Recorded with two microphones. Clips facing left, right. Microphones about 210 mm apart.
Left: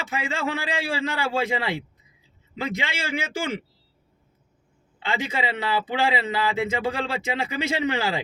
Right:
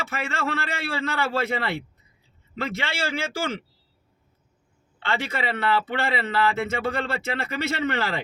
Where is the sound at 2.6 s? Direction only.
15° left (ahead or behind).